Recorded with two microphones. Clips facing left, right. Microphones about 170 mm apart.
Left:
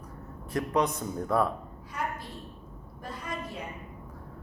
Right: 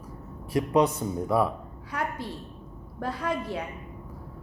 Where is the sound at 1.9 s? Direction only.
65° right (ahead or behind).